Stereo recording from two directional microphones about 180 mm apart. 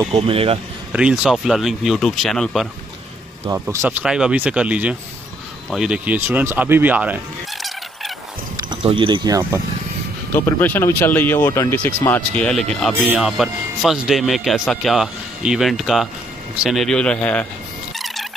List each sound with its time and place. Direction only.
0.1 s speech: 30° right (ahead or behind)
0.9 s speech: 5° right (ahead or behind)
3.4 s speech: 15° right (ahead or behind)
8.6 s speech: 25° right (ahead or behind)
10.3 s speech: 10° left (ahead or behind)
17.9 s a sound: centre (ahead or behind)